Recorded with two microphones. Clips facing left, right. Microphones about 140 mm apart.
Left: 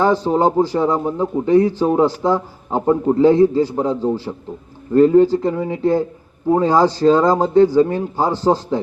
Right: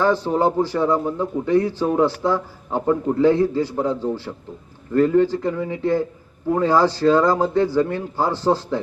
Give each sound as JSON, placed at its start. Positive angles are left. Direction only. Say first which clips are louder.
{"t": 0.0, "sound": "a man's voice", "louder": "left 3 dB", "side_deg": 15}